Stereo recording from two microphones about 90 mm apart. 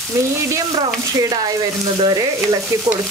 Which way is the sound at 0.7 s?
50° right (ahead or behind).